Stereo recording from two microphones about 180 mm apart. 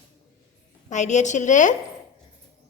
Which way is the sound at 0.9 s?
40° left (ahead or behind).